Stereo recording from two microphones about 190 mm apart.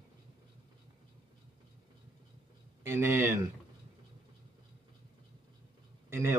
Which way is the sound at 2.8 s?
15° right (ahead or behind).